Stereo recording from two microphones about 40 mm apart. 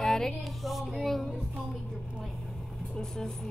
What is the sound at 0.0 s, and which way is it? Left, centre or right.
Music, centre.